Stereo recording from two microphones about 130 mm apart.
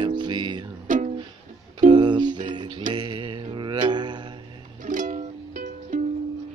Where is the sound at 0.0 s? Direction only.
35° right (ahead or behind).